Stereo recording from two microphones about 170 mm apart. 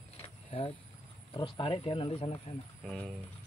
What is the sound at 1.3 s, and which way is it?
Speech, 30° left (ahead or behind).